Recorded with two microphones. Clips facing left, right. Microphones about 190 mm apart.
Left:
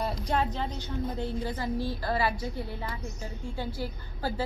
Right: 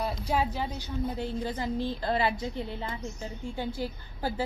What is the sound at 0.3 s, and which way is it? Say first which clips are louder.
A woman's voice: right 1 dB; 10° right (ahead or behind).